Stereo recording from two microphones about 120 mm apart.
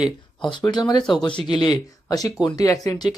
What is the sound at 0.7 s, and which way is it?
Speech, 35° left (ahead or behind).